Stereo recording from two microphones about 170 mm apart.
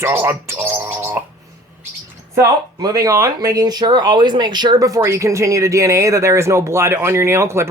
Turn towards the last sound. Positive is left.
turn(degrees=-15)  # may be behind; listen again after turning